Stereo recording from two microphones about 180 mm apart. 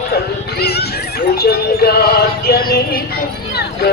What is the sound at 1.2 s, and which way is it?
Music, 60° left (ahead or behind).